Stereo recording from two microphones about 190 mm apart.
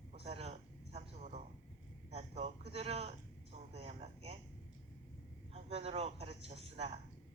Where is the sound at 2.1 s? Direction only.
35° right (ahead or behind).